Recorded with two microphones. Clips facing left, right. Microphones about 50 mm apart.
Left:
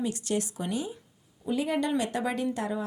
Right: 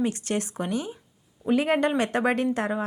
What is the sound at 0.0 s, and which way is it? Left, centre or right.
Speech, right.